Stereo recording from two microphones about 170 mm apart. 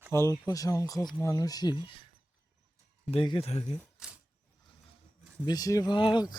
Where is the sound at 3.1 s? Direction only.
30° left (ahead or behind).